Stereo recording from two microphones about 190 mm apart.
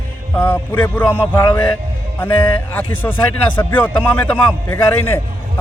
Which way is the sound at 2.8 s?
10° left (ahead or behind).